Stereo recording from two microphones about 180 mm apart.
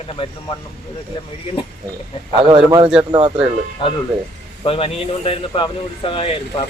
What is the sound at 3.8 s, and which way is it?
Speech, 25° left (ahead or behind).